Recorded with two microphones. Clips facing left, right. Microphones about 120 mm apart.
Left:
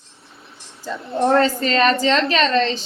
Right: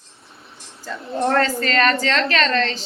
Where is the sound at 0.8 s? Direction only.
20° left (ahead or behind).